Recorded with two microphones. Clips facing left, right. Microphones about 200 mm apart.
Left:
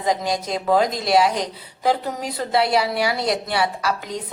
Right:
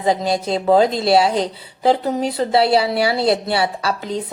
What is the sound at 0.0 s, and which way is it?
Speech, 30° right (ahead or behind).